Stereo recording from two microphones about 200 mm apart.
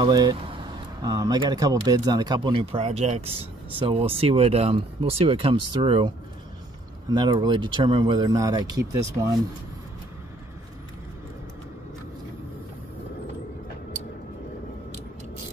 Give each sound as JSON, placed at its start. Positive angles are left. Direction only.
{"t": 0.0, "sound": "speech", "side_deg": -20}